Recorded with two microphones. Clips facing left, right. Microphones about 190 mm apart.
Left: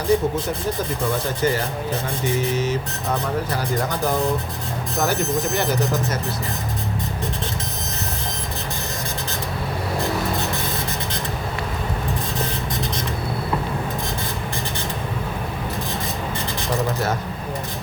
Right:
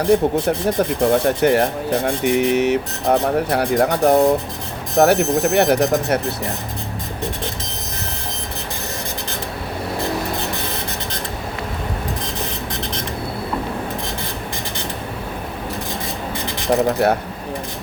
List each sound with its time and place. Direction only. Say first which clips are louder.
0.0 s speech: right 4 dB; 65° right (ahead or behind)
17.0 s speech: right 7 dB; 65° right (ahead or behind)